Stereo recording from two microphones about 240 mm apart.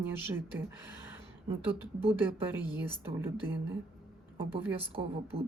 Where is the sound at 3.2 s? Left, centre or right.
Centre.